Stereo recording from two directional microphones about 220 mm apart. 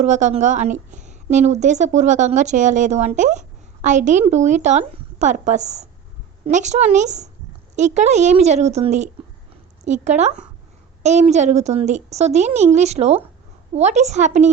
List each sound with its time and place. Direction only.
0.0 s a woman's voice: 35° right (ahead or behind)